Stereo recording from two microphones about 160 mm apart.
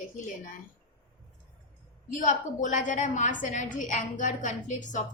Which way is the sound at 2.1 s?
55° left (ahead or behind).